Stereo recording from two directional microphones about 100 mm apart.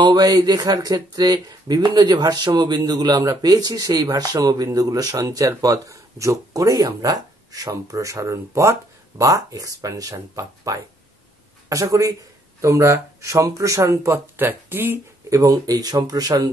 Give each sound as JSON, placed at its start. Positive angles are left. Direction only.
{"t": 0.0, "sound": "a man's voice", "side_deg": -50}